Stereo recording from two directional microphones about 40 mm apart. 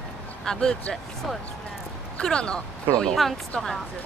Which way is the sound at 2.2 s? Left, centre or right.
Left.